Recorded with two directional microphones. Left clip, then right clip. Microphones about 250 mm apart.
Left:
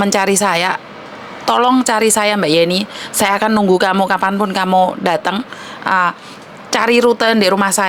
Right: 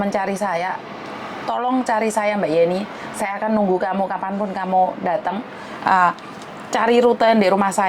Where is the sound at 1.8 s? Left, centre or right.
Left.